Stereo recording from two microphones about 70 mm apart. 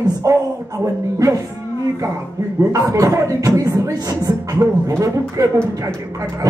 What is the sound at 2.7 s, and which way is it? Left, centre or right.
Speech, right.